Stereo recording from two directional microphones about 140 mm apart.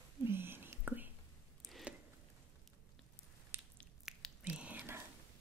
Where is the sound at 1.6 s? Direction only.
Centre (ahead or behind).